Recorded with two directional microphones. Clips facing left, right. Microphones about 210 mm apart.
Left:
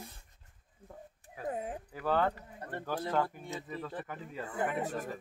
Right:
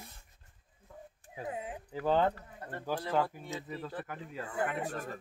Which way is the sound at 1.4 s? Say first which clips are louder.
Left 2 dB; 45° left (ahead or behind).